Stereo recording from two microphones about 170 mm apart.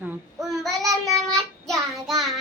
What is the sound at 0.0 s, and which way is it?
Child singing, 5° right (ahead or behind).